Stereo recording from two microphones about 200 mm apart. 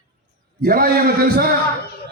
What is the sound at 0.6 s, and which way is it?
Speech, 50° right (ahead or behind).